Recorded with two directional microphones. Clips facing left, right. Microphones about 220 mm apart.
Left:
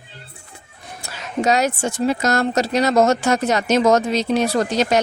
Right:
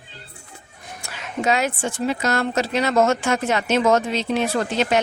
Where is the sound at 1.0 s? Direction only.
40° left (ahead or behind).